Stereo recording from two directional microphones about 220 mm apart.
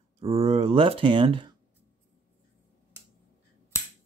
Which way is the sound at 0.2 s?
30° right (ahead or behind).